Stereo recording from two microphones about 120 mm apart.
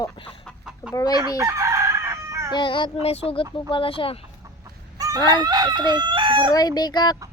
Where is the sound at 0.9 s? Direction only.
35° left (ahead or behind).